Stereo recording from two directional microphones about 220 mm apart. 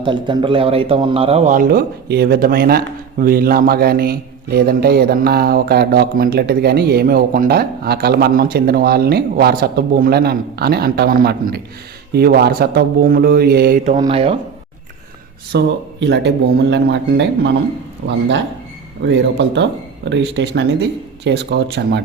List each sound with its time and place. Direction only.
0.0 s speech: 20° right (ahead or behind); by 13.9 s 40° right (ahead or behind)
13.9 s speech: 25° right (ahead or behind)
15.5 s speech: 50° right (ahead or behind)